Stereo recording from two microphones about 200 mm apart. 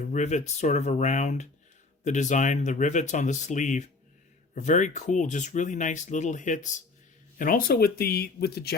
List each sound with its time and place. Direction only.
0.0 s speech: 35° left (ahead or behind); by 8.7 s 55° left (ahead or behind)